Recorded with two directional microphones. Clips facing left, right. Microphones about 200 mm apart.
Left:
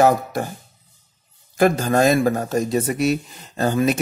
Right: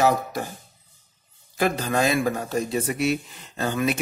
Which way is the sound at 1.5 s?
45° left (ahead or behind).